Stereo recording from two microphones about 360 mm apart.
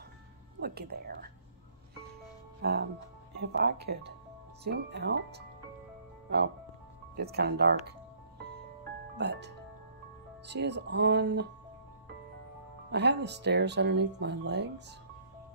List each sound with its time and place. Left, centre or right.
0.6 s speech: right
2.6 s speech: right
7.2 s speech: right
9.1 s speech: right
12.9 s speech: right